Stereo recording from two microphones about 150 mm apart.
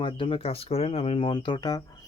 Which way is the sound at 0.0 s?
35° left (ahead or behind).